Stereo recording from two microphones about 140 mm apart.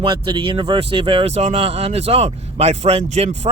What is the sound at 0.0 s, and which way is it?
Speech, 35° right (ahead or behind).